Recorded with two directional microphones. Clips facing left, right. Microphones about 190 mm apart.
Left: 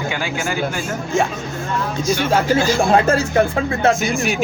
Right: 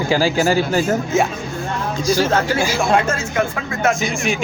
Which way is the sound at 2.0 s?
30° right (ahead or behind).